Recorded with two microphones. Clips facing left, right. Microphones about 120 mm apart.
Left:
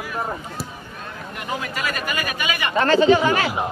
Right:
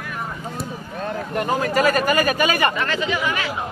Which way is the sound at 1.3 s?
40° right (ahead or behind).